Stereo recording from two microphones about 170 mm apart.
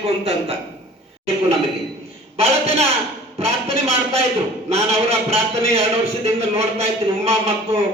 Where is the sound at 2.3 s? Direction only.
35° right (ahead or behind).